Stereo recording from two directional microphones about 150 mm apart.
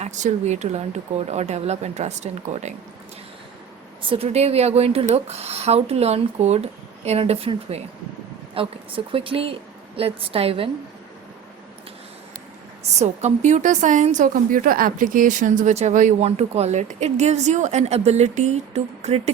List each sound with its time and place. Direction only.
0.0 s a woman's voice: 50° right (ahead or behind)
4.1 s a woman's voice: 45° right (ahead or behind)
12.9 s a woman's voice: 50° right (ahead or behind)